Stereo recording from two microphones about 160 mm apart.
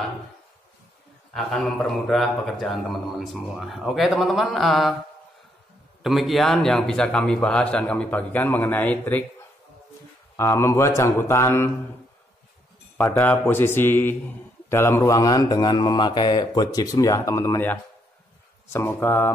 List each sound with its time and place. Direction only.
1.3 s speech: 5° left (ahead or behind)
6.0 s speech: centre (ahead or behind)
10.3 s speech: 20° left (ahead or behind)
12.9 s speech: 15° left (ahead or behind)